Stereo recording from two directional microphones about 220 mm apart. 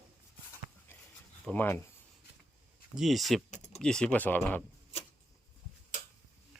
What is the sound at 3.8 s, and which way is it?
Speech, 5° left (ahead or behind).